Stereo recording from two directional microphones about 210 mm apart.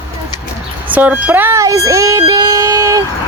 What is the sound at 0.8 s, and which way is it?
Child singing, 10° right (ahead or behind).